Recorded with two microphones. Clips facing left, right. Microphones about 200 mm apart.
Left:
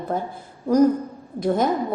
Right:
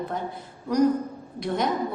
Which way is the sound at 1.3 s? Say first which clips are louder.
Left 7 dB; 50° left (ahead or behind).